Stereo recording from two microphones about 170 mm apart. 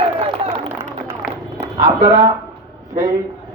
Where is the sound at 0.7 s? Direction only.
15° right (ahead or behind).